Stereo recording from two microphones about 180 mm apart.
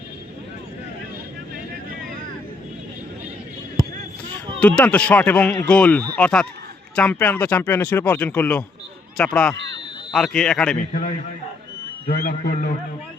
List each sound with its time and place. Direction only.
4.6 s speech: 5° left (ahead or behind)
9.6 s a sound: 85° right
10.1 s speech: centre (ahead or behind)
12.0 s a man's voice: 55° left (ahead or behind)